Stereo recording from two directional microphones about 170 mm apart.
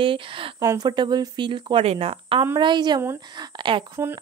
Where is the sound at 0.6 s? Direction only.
20° right (ahead or behind).